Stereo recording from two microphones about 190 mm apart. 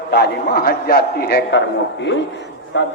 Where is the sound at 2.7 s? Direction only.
70° left (ahead or behind).